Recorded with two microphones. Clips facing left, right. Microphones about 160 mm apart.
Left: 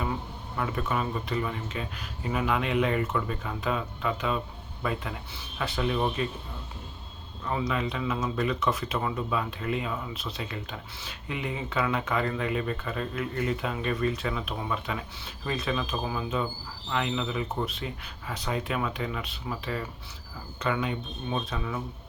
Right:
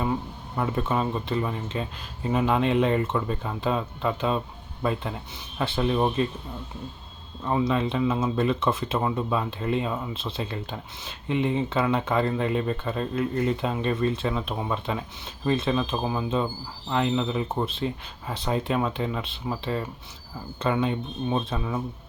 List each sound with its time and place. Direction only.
0.5 s speech: 30° right (ahead or behind)
7.4 s speech: 30° right (ahead or behind)